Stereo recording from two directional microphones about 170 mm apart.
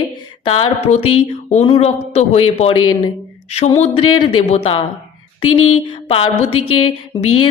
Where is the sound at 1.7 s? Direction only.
40° left (ahead or behind).